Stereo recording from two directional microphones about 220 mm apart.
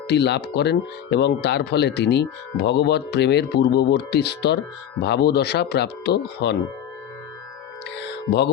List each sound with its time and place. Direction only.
0.1 s speech: 50° left (ahead or behind)
7.9 s music: 50° left (ahead or behind)